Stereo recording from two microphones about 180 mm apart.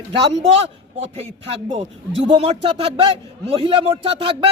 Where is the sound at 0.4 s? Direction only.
35° right (ahead or behind).